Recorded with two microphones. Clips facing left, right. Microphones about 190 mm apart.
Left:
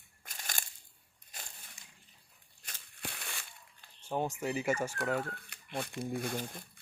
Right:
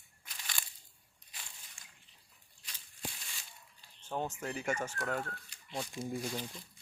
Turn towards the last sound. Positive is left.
turn(degrees=55)  # may be behind; listen again after turning